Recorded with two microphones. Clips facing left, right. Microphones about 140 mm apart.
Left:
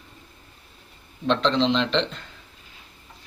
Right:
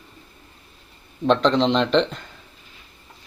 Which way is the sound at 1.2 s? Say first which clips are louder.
Right 3 dB; 45° right (ahead or behind).